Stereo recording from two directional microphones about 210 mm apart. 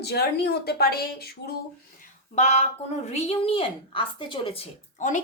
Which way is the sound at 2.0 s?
35° left (ahead or behind).